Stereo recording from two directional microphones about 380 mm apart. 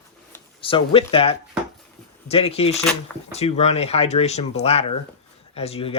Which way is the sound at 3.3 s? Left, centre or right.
Centre.